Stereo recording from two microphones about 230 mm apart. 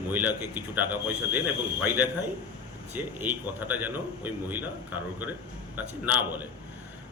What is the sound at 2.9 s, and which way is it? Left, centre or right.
A man's voice, centre.